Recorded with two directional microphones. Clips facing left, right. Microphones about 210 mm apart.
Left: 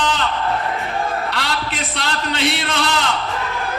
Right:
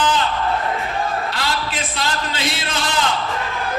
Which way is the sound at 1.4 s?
65° left (ahead or behind).